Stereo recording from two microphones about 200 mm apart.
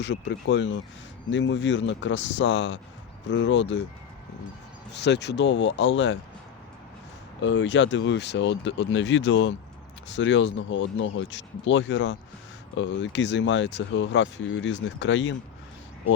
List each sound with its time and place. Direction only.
0.0 s speech: 60° left (ahead or behind)
4.9 s speech: 60° left (ahead or behind)
7.4 s speech: 65° left (ahead or behind)